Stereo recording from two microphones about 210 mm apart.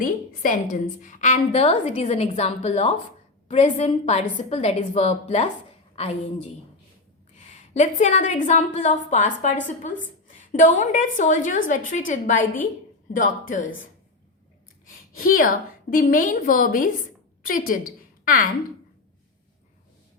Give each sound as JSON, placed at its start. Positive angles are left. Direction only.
{"t": 0.0, "sound": "a woman's voice", "side_deg": 40}
{"t": 7.3, "sound": "a woman's voice", "side_deg": 35}
{"t": 15.2, "sound": "a woman's voice", "side_deg": 40}